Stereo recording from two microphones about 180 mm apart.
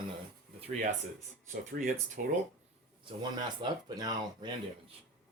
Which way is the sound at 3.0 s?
25° right (ahead or behind).